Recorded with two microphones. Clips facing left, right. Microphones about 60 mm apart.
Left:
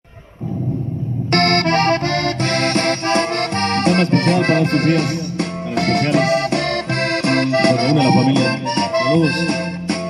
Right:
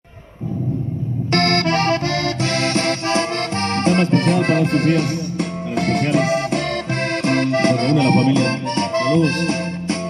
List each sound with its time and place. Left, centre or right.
1.3 s accordion: left